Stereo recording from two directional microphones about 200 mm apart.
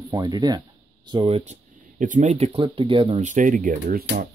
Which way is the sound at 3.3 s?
40° right (ahead or behind).